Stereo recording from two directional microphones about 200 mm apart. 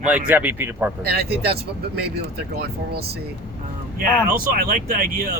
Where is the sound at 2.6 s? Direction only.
50° right (ahead or behind).